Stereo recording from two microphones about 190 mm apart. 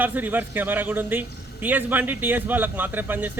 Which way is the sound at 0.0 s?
10° right (ahead or behind).